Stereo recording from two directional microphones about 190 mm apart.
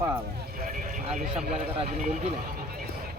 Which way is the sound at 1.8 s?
35° right (ahead or behind).